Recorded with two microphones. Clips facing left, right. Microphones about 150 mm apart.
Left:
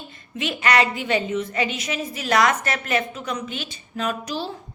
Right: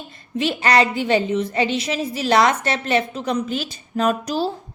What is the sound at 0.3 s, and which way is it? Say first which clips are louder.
A woman's voice: right 3 dB; 35° right (ahead or behind).